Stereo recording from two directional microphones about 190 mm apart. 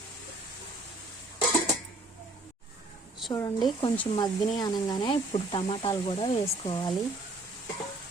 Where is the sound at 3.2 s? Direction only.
15° left (ahead or behind).